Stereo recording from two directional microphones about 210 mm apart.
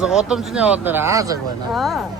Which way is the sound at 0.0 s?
5° right (ahead or behind).